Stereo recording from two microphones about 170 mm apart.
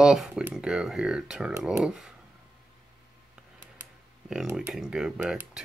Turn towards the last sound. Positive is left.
turn(degrees=-5)  # may be behind; listen again after turning